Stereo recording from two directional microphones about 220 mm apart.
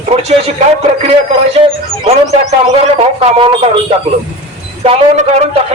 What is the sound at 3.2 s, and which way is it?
Speech, 25° right (ahead or behind).